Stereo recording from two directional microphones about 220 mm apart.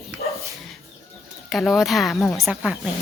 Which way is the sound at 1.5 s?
Centre (ahead or behind).